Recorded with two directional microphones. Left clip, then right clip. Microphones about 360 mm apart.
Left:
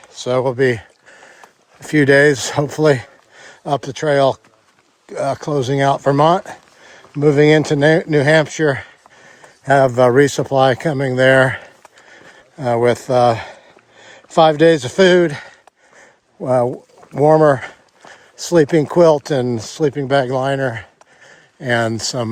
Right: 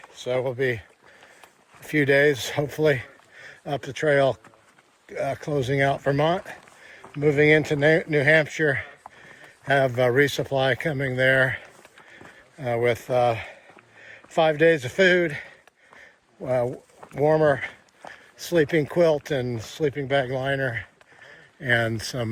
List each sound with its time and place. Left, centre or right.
0.3 s speech: left
1.8 s speech: left
2.7 s a sound: left
4.0 s speech: left
6.1 s a sound: left
7.2 s speech: left
16.5 s speech: left